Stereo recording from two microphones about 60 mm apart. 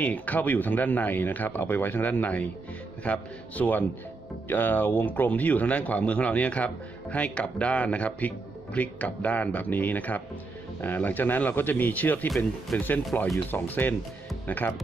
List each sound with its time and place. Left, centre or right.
0.0 s speech: left